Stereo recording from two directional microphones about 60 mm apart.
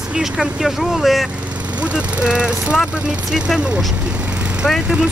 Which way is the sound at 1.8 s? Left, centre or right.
Centre.